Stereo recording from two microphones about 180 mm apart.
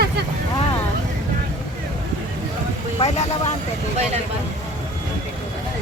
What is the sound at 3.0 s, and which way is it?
Vehicle, 40° left (ahead or behind).